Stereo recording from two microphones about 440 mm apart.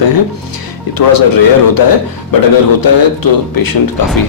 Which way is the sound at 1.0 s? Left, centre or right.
Left.